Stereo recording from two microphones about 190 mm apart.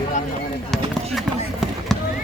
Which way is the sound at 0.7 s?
Centre (ahead or behind).